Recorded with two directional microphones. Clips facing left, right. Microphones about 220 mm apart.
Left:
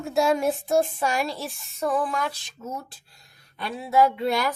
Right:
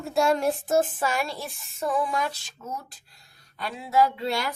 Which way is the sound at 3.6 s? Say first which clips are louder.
Left 2 dB; 25° left (ahead or behind).